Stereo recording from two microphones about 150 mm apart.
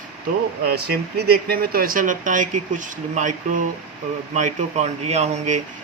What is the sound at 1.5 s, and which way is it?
Speech, 80° right.